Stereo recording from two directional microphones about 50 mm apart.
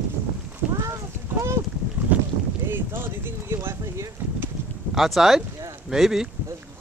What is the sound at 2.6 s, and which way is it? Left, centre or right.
Speech, right.